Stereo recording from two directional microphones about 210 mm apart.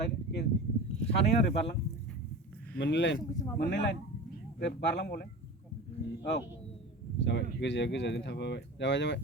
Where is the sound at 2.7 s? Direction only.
55° left (ahead or behind).